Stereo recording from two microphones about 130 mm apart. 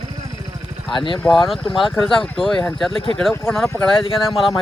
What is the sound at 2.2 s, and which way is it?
Speech, centre (ahead or behind).